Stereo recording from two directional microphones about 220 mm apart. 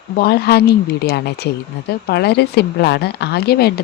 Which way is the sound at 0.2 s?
45° left (ahead or behind).